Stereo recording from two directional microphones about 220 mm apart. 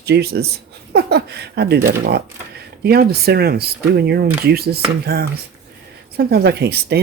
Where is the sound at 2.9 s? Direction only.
45° right (ahead or behind).